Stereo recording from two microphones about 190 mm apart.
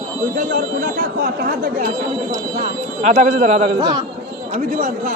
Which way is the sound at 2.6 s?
35° right (ahead or behind).